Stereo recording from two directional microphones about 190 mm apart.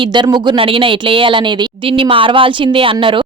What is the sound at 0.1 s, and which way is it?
Speech, 25° right (ahead or behind).